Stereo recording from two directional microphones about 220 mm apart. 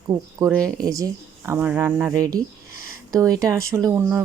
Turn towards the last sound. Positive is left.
turn(degrees=-10)  # may be behind; listen again after turning